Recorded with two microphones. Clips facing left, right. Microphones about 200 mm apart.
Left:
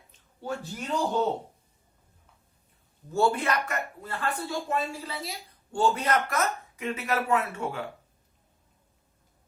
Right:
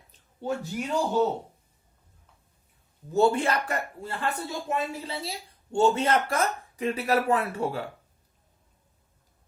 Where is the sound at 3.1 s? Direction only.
25° right (ahead or behind).